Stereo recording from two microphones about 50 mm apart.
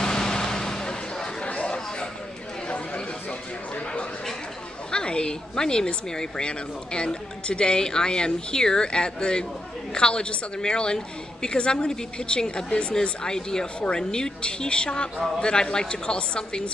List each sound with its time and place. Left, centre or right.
0.0 s vehicle: centre
2.7 s chatter: left
4.9 s speech: centre